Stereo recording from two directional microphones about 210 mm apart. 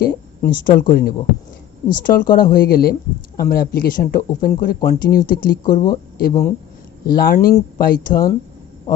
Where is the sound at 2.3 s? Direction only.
45° left (ahead or behind).